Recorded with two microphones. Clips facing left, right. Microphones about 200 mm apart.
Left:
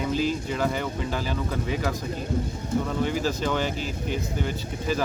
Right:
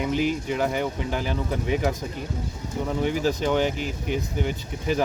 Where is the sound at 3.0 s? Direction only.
15° right (ahead or behind).